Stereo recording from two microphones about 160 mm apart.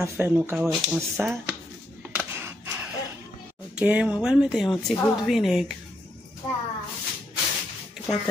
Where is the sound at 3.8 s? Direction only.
5° right (ahead or behind).